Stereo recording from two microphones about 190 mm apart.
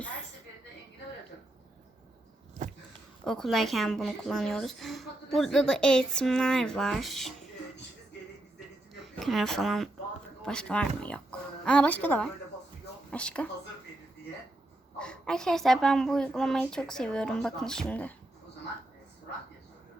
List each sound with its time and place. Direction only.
2.6 s a sound: 40° right (ahead or behind)
3.2 s a woman's voice: centre (ahead or behind)
9.1 s a woman's voice: centre (ahead or behind)
14.9 s a woman's voice: 5° left (ahead or behind)